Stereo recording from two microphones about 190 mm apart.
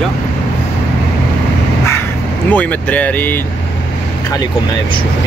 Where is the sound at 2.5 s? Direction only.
10° left (ahead or behind).